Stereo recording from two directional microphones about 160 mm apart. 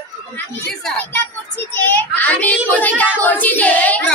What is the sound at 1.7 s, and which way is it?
A child's voice, 10° left (ahead or behind).